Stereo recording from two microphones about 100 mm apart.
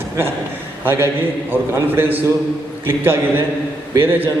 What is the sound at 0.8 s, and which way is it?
A man's voice, 20° right (ahead or behind).